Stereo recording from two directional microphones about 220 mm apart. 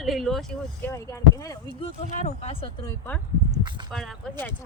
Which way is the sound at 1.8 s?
30° left (ahead or behind).